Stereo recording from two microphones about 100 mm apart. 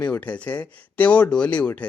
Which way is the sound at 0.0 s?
15° left (ahead or behind).